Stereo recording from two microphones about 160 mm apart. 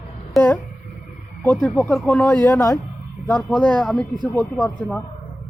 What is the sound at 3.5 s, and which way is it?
Speech, 5° left (ahead or behind).